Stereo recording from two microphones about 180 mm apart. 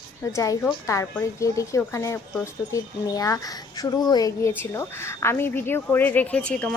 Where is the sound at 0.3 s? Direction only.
20° left (ahead or behind).